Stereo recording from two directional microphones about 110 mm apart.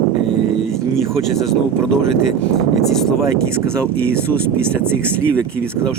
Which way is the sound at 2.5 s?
5° left (ahead or behind).